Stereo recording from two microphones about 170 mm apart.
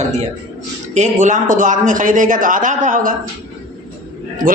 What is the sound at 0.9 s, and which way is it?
A man's voice, 45° right (ahead or behind).